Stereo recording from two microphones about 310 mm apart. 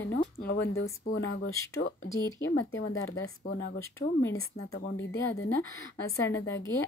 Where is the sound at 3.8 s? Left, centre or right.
Centre.